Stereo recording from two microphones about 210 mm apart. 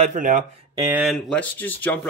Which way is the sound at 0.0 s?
35° right (ahead or behind).